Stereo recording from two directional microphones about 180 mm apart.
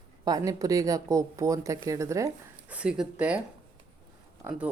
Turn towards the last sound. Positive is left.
turn(degrees=-10)  # may be behind; listen again after turning